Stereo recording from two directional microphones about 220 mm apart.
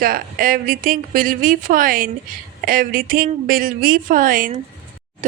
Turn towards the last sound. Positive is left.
turn(degrees=-40)  # may be behind; listen again after turning